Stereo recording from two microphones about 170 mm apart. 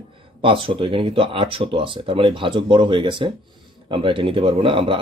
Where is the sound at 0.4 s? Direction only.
30° right (ahead or behind).